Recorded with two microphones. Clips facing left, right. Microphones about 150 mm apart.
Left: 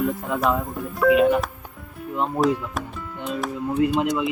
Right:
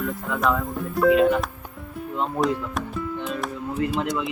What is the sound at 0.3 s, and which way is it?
Speech, 20° left (ahead or behind).